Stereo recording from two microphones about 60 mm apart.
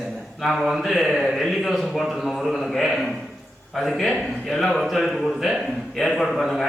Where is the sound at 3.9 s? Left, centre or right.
Centre.